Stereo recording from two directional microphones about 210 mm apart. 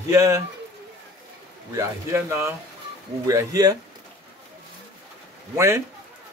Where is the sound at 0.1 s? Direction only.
15° right (ahead or behind).